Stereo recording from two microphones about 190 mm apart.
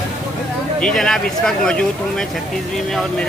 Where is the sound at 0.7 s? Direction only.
5° left (ahead or behind).